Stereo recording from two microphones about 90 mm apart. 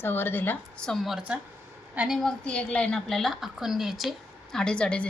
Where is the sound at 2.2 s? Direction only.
5° left (ahead or behind).